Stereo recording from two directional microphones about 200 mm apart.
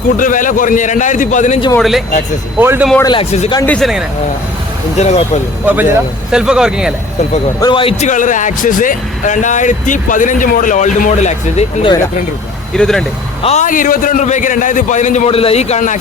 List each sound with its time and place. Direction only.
0.2 s speech: 40° left (ahead or behind)
1.8 s speech: centre (ahead or behind)
3.0 s speech: 20° left (ahead or behind)
3.7 s speech: centre (ahead or behind)
4.9 s speech: 35° left (ahead or behind)
5.6 s speech: 10° right (ahead or behind)
7.6 s speech: 25° left (ahead or behind)
12.7 s speech: centre (ahead or behind)
13.4 s speech: 35° left (ahead or behind)